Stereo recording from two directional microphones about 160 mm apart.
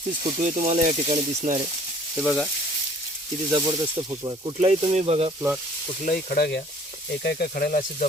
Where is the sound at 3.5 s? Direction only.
30° right (ahead or behind).